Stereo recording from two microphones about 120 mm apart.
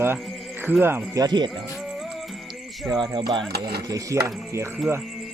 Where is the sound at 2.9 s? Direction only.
35° right (ahead or behind).